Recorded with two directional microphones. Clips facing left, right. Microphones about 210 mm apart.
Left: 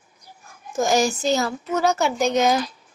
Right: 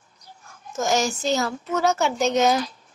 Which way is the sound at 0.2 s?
10° left (ahead or behind).